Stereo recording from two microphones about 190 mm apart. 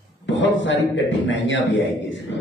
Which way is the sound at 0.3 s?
75° left (ahead or behind).